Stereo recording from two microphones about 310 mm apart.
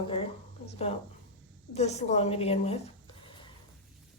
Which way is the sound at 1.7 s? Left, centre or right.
Left.